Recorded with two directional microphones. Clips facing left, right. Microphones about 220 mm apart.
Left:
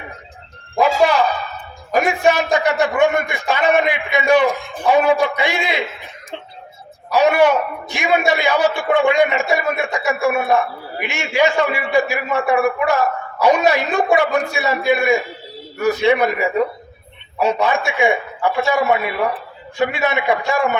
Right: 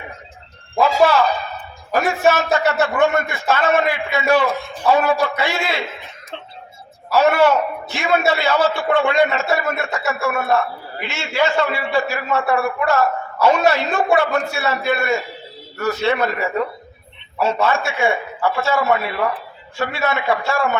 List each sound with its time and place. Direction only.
0.8 s a man's voice: 15° left (ahead or behind)
7.1 s a man's voice: 15° left (ahead or behind)